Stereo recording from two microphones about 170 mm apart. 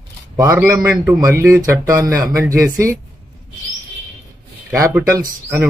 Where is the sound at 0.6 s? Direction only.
10° right (ahead or behind).